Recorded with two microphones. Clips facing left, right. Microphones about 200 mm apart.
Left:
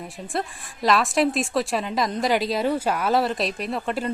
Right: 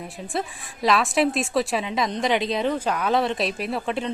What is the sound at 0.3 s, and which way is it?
A woman's voice, centre (ahead or behind).